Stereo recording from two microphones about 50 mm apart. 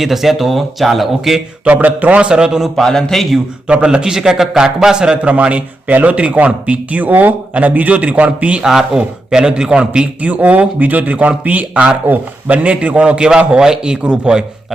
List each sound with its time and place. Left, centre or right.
0.0 s speech: centre
1.6 s a man's voice: right
2.8 s speech: centre
3.7 s a man's voice: right
8.6 s a man's voice: centre
10.2 s a man's voice: right